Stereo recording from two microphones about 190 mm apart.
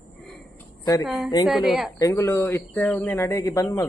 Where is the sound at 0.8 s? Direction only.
20° left (ahead or behind).